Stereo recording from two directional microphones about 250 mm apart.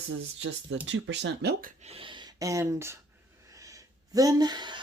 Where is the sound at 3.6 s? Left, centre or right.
Centre.